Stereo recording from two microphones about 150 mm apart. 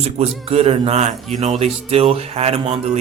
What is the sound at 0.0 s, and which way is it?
Speech, 45° right (ahead or behind).